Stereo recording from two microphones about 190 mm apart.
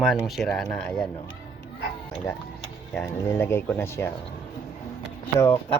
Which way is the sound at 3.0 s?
15° left (ahead or behind).